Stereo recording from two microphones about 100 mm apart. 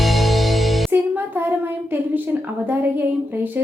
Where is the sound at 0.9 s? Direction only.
20° right (ahead or behind).